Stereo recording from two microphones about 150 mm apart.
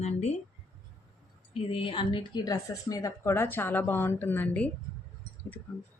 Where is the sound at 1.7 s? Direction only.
35° left (ahead or behind); by 4.7 s 10° left (ahead or behind).